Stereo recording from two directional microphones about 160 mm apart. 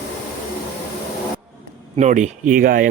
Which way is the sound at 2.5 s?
60° right (ahead or behind).